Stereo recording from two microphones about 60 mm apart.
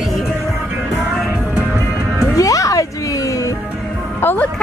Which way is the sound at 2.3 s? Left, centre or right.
Left.